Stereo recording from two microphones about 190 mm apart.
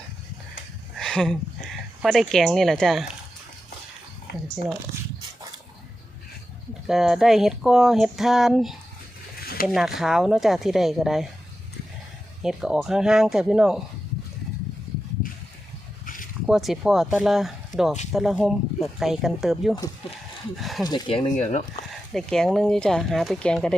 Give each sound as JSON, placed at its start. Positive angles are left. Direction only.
{"t": 0.9, "sound": "a sound", "side_deg": 5}
{"t": 2.0, "sound": "speech", "side_deg": 0}
{"t": 6.8, "sound": "speech", "side_deg": 0}
{"t": 9.4, "sound": "a sound", "side_deg": 50}
{"t": 9.6, "sound": "speech", "side_deg": 0}
{"t": 12.4, "sound": "speech", "side_deg": -5}
{"t": 16.0, "sound": "a sound", "side_deg": 45}
{"t": 16.5, "sound": "speech", "side_deg": 0}
{"t": 20.8, "sound": "speech", "side_deg": 25}
{"t": 21.3, "sound": "speech", "side_deg": 40}
{"t": 22.1, "sound": "speech", "side_deg": 5}